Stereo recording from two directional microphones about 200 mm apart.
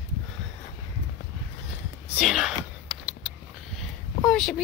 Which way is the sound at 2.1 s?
Centre (ahead or behind).